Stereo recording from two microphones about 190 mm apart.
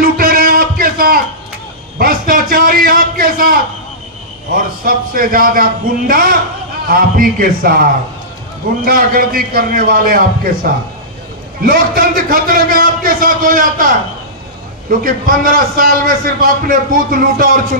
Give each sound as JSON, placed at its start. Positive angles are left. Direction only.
{"t": 0.0, "sound": "music", "side_deg": -50}
{"t": 2.0, "sound": "a sound", "side_deg": -50}
{"t": 4.6, "sound": "a man's voice", "side_deg": -50}